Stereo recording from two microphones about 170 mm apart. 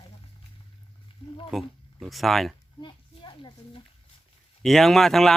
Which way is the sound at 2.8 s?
30° left (ahead or behind).